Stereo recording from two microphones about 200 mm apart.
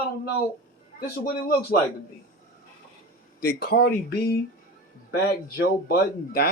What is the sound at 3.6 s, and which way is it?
Speech, 55° left (ahead or behind).